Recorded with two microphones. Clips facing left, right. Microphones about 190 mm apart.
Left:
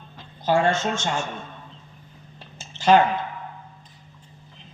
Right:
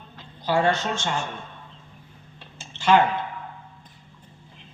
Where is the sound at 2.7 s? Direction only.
40° left (ahead or behind).